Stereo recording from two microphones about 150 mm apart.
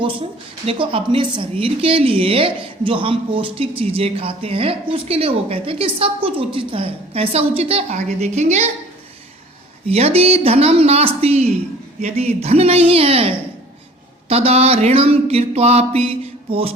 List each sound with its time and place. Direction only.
0.6 s speech: 40° right (ahead or behind)
9.8 s speech: 45° right (ahead or behind)